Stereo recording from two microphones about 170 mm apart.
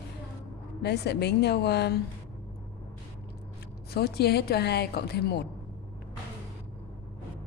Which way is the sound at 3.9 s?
70° left (ahead or behind).